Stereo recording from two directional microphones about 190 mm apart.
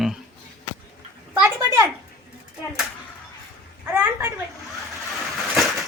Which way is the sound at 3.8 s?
10° right (ahead or behind).